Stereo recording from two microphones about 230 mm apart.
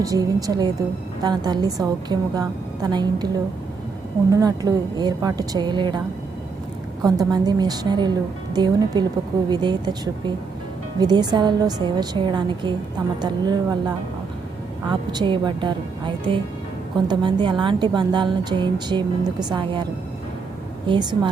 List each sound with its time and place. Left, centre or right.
0.0 s a woman's voice: centre
7.0 s a woman's voice: centre